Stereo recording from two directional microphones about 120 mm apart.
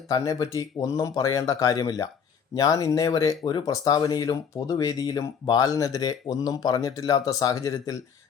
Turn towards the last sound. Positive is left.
turn(degrees=30)  # may be behind; listen again after turning